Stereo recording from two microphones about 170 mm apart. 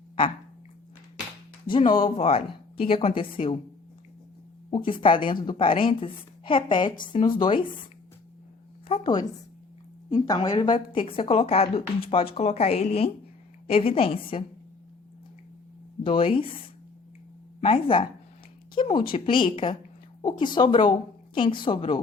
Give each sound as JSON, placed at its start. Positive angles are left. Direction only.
{"t": 1.6, "sound": "a woman's voice", "side_deg": 30}
{"t": 4.9, "sound": "a woman's voice", "side_deg": 30}
{"t": 8.9, "sound": "a woman's voice", "side_deg": 25}
{"t": 16.0, "sound": "a woman's voice", "side_deg": 30}